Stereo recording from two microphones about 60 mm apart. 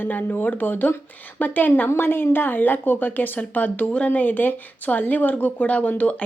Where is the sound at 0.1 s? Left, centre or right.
Left.